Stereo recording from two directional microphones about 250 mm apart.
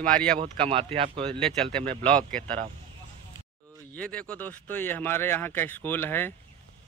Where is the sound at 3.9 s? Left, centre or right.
Centre.